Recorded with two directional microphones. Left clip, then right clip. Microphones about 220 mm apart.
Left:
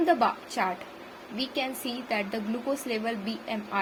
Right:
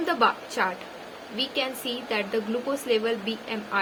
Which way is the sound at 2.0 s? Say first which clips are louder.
Right 3 dB; 25° left (ahead or behind).